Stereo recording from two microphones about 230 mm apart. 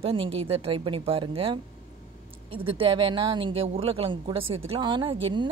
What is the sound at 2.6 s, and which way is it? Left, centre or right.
Speech, right.